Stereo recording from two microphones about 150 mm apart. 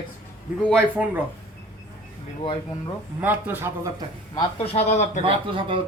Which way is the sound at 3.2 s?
10° right (ahead or behind).